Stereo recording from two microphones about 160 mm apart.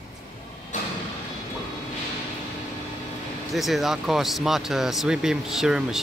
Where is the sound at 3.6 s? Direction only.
Centre (ahead or behind).